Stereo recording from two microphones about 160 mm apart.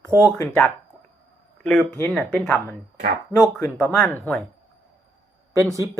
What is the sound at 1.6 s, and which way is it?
Speech, 5° left (ahead or behind).